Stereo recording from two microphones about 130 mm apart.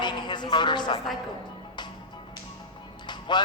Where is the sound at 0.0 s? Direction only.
35° left (ahead or behind).